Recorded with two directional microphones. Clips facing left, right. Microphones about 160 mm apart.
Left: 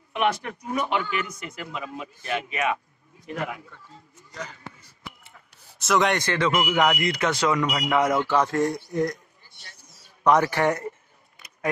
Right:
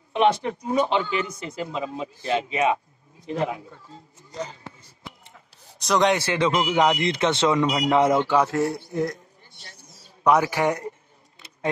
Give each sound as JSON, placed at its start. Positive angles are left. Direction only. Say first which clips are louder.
{"t": 0.1, "sound": "speech", "louder": "right 5 dB", "side_deg": -25}
{"t": 5.8, "sound": "a man's voice", "louder": "right 2 dB", "side_deg": 0}
{"t": 6.5, "sound": "speech", "louder": "right 1 dB", "side_deg": -25}
{"t": 8.3, "sound": "a man's voice", "louder": "right 1 dB", "side_deg": -10}
{"t": 10.2, "sound": "speech", "louder": "even", "side_deg": -10}